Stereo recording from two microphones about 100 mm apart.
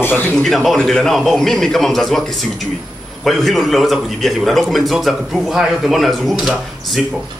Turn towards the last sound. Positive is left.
turn(degrees=0)  # may be behind; listen again after turning